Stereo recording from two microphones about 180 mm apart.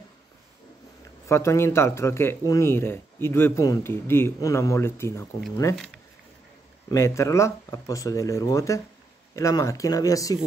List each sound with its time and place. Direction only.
1.3 s speech: 15° left (ahead or behind)
6.9 s speech: 15° left (ahead or behind)